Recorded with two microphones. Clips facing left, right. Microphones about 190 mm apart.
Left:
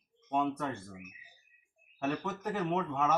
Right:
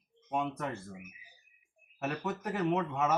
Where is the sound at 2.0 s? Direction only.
5° right (ahead or behind).